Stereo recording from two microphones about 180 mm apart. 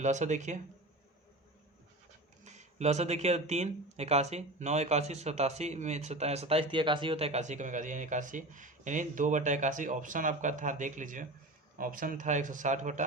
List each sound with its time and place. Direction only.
0.0 s speech: 40° right (ahead or behind)
2.4 s speech: 40° right (ahead or behind)